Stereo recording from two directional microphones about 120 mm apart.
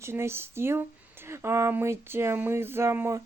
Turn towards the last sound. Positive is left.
turn(degrees=-20)  # may be behind; listen again after turning